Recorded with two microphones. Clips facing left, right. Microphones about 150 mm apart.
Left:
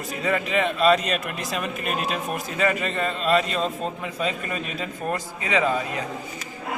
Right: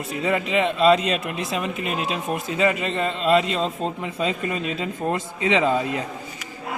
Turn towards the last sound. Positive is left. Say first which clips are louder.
# right 2 dB
turn(degrees=-25)  # may be behind; listen again after turning